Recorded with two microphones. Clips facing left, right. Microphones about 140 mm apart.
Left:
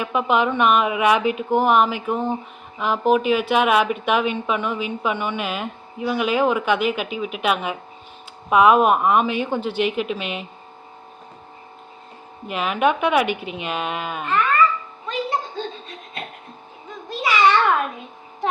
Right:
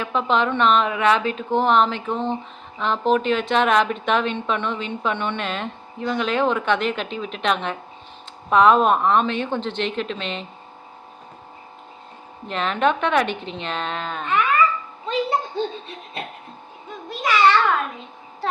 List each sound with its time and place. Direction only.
0.0 s speech: 10° left (ahead or behind)
12.5 s speech: 10° left (ahead or behind)
15.0 s music: 25° right (ahead or behind)
17.1 s a sound: 10° left (ahead or behind)